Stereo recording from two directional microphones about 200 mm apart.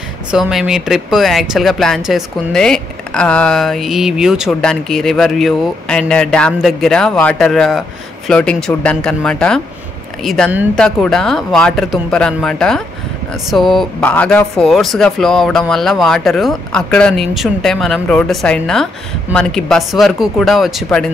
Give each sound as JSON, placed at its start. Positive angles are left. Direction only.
{"t": 0.3, "sound": "speech", "side_deg": 0}